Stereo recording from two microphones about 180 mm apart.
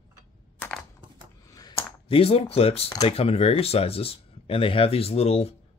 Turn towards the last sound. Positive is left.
turn(degrees=35)  # may be behind; listen again after turning